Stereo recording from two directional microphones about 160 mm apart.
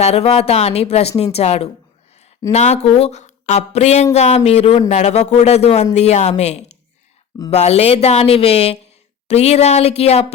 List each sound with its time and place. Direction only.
0.0 s speech: 40° left (ahead or behind)